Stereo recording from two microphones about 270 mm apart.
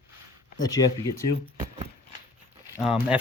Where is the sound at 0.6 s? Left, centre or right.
Centre.